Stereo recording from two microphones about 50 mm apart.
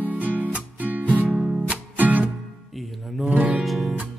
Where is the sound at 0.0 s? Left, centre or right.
Right.